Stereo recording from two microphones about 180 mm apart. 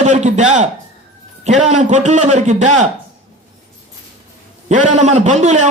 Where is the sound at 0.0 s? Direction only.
40° right (ahead or behind).